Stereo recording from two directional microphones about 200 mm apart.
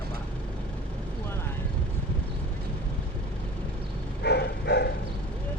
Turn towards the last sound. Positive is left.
turn(degrees=55)  # may be behind; listen again after turning